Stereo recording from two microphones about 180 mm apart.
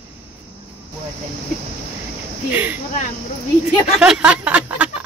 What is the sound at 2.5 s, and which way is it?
Speech, 10° right (ahead or behind).